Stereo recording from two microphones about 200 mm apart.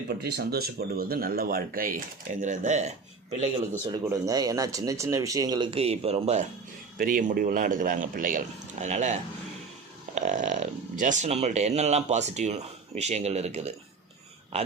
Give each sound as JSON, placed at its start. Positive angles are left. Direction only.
{"t": 0.2, "sound": "speech", "side_deg": -50}
{"t": 3.7, "sound": "speech", "side_deg": -15}
{"t": 7.0, "sound": "speech", "side_deg": -40}
{"t": 10.2, "sound": "speech", "side_deg": -40}